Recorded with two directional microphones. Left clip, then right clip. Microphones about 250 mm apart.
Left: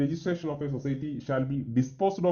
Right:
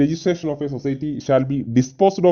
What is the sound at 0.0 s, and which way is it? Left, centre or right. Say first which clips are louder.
Speech: right 10 dB; right.